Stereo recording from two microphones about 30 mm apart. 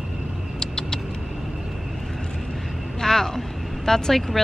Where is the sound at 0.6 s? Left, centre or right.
Left.